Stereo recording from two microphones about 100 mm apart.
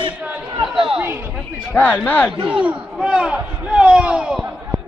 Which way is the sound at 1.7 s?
15° left (ahead or behind).